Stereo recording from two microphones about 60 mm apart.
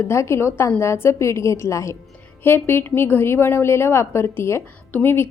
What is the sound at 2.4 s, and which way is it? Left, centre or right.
A woman's voice, left.